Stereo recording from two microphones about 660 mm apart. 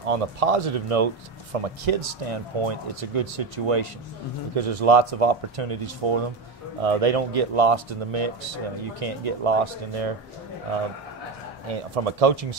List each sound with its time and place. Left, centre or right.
0.0 s speech: right
11.6 s speech: right